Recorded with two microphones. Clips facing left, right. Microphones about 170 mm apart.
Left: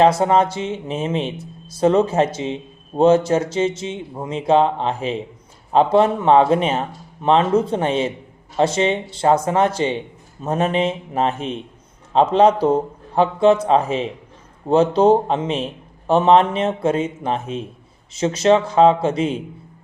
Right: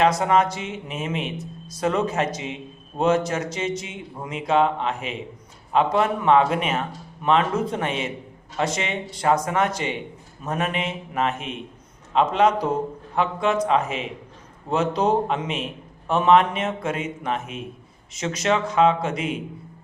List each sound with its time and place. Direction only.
0.0 s speech: 30° left (ahead or behind)